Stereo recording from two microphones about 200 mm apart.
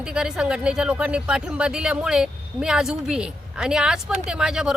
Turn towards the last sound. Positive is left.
turn(degrees=-5)  # may be behind; listen again after turning